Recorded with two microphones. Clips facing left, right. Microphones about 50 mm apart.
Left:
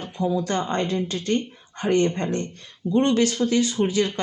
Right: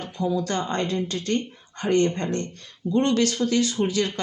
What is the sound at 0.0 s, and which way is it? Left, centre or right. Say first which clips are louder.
Speech: left 1 dB; left.